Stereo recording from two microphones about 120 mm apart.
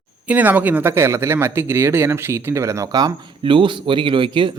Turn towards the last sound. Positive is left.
turn(degrees=-45)  # may be behind; listen again after turning